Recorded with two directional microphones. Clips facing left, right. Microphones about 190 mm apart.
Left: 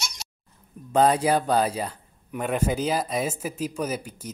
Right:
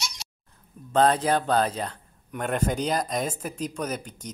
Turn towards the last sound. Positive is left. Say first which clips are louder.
# left 2 dB
turn(degrees=5)  # may be behind; listen again after turning